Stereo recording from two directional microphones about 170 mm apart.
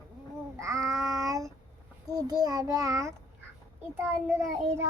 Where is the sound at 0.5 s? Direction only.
20° right (ahead or behind).